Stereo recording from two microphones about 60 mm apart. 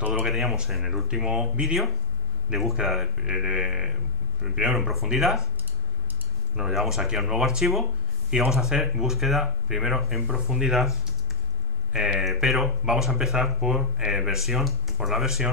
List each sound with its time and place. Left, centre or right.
0.0 s speech: right
0.3 s speech: centre
6.5 s speech: centre